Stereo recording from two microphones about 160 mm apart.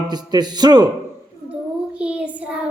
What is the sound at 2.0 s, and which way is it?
Child singing, 5° right (ahead or behind).